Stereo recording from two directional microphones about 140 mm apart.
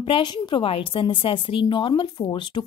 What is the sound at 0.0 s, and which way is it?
A woman's voice, 35° left (ahead or behind).